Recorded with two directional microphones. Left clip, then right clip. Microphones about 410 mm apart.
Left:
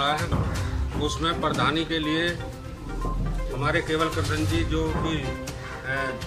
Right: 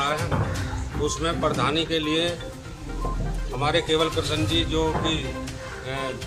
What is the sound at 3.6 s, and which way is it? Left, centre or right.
Speech, centre.